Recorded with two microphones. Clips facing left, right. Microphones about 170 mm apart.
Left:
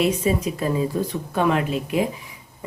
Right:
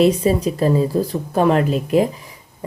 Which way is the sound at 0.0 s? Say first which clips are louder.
Right 6 dB; 35° right (ahead or behind).